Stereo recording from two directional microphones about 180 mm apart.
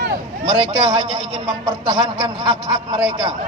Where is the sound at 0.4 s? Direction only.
30° right (ahead or behind).